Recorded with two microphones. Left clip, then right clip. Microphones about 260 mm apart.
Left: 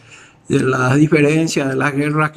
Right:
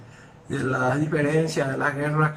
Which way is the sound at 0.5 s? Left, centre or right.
Left.